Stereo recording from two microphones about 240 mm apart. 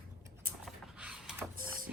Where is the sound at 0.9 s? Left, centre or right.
Centre.